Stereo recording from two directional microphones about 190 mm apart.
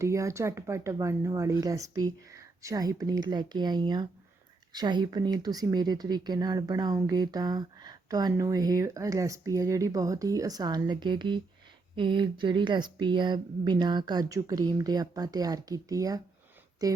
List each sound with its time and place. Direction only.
0.0 s speech: 15° right (ahead or behind)